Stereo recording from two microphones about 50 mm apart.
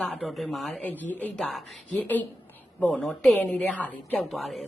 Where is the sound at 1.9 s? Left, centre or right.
Left.